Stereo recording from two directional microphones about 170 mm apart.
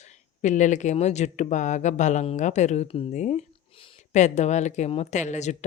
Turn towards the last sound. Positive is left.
turn(degrees=45)  # may be behind; listen again after turning